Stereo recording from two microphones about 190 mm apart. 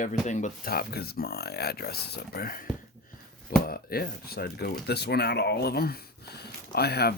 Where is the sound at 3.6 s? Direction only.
55° left (ahead or behind).